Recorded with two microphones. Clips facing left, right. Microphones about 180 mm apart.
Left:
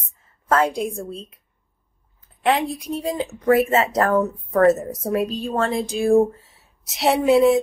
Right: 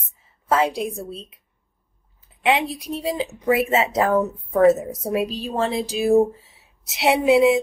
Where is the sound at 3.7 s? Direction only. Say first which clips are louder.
Left 1 dB; 5° right (ahead or behind).